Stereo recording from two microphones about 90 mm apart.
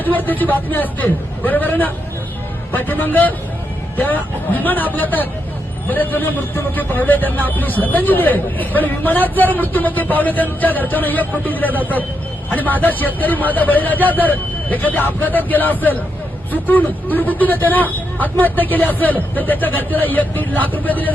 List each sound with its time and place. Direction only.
0.0 s a man's voice: 20° left (ahead or behind)